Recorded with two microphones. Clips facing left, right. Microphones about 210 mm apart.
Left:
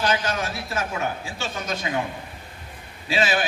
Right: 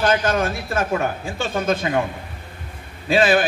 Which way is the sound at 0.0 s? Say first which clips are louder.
Right 6 dB; 50° right (ahead or behind).